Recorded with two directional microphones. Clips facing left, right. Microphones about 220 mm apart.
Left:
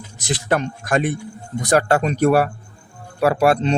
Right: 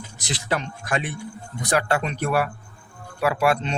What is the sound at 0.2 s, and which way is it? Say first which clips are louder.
A man's voice: left 6 dB; 50° left (ahead or behind).